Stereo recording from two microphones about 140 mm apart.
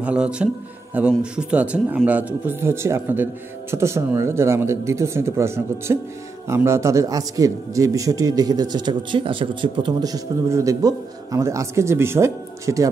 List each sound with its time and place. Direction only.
0.0 s a man's voice: 5° right (ahead or behind)